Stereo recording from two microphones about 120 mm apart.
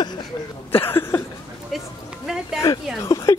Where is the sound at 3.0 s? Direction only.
30° left (ahead or behind).